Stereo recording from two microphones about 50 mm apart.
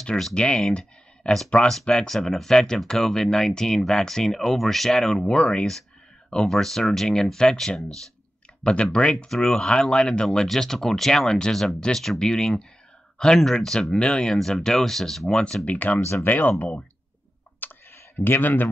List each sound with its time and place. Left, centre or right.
0.0 s speech: centre
1.2 s speech: left
1.7 s speech: centre
5.2 s speech: centre
6.3 s speech: centre
8.9 s speech: left
9.3 s speech: centre
14.3 s speech: centre
15.2 s speech: centre
15.6 s speech: left
17.6 s clicking: left